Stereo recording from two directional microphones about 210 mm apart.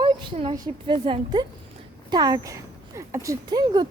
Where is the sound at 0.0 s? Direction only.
25° right (ahead or behind).